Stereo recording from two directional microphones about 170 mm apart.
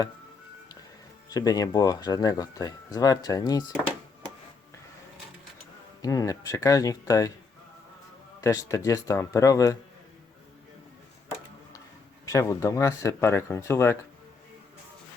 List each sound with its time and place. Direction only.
1.3 s speech: 20° left (ahead or behind)
6.0 s speech: 20° left (ahead or behind)
8.4 s speech: 20° left (ahead or behind)
12.2 s speech: 20° left (ahead or behind)